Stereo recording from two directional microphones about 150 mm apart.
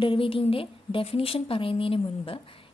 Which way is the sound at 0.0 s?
35° left (ahead or behind).